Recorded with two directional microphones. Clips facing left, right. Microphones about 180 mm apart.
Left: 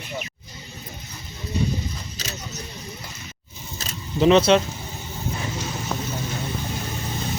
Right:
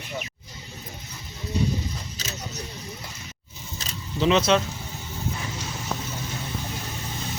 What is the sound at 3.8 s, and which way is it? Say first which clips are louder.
Keys jangling: left 5 dB; 40° left (ahead or behind).